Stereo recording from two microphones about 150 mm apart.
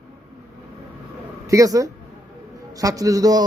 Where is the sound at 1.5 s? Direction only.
20° right (ahead or behind).